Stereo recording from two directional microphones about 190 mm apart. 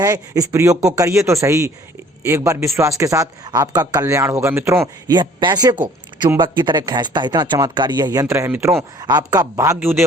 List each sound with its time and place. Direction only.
0.0 s speech: 20° right (ahead or behind)